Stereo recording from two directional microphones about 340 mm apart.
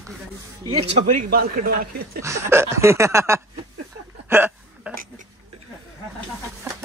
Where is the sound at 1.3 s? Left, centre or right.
Right.